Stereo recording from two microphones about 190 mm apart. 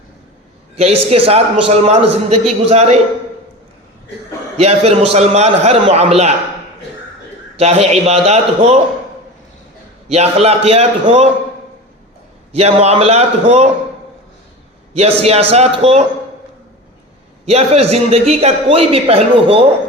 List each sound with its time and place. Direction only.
0.8 s a man's voice: 30° right (ahead or behind)
4.5 s a man's voice: 30° right (ahead or behind)
7.5 s a man's voice: 30° right (ahead or behind)
10.1 s a man's voice: 35° right (ahead or behind)
12.5 s a man's voice: 35° right (ahead or behind)
14.9 s a man's voice: 30° right (ahead or behind)
17.4 s a man's voice: 30° right (ahead or behind)